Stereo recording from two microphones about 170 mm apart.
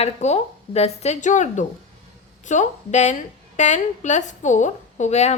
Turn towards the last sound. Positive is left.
turn(degrees=40)  # may be behind; listen again after turning